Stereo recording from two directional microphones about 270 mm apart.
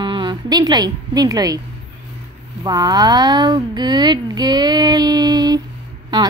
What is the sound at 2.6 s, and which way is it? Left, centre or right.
Speech, centre.